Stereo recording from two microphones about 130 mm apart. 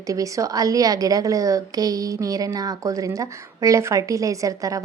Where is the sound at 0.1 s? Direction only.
25° right (ahead or behind).